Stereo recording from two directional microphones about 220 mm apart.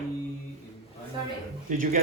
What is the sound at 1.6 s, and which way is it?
Speech, 35° right (ahead or behind).